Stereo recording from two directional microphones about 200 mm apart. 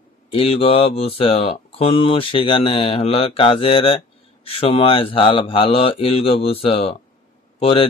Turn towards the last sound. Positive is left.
turn(degrees=25)  # may be behind; listen again after turning